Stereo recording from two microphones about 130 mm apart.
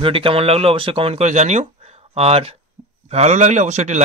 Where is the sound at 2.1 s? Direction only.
50° right (ahead or behind).